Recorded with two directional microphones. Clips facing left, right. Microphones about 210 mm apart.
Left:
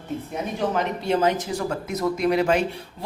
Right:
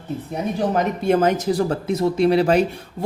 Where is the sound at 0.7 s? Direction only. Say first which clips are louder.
Right 6 dB; 50° right (ahead or behind).